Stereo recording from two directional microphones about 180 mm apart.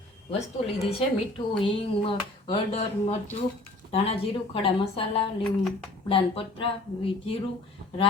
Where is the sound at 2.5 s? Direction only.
35° left (ahead or behind).